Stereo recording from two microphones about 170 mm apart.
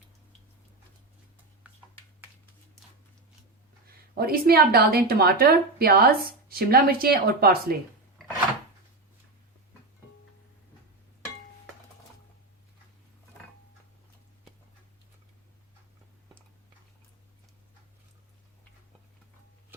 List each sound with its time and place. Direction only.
4.1 s a woman's voice: 65° right (ahead or behind)